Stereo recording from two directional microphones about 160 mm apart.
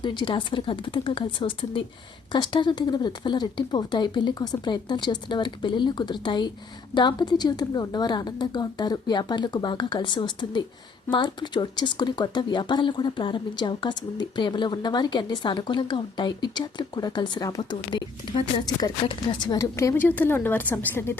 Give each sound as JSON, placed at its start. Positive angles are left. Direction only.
{"t": 0.0, "sound": "speech", "side_deg": 30}